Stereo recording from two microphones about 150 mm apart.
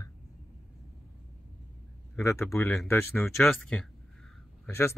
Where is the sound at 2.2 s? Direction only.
20° left (ahead or behind).